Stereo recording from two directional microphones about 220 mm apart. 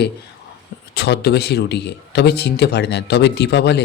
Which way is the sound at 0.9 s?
50° left (ahead or behind).